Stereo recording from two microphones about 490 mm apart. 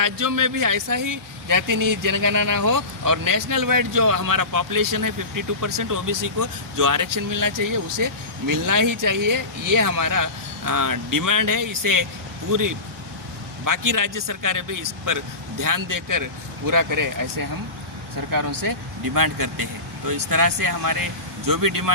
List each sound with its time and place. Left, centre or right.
0.0 s speech: right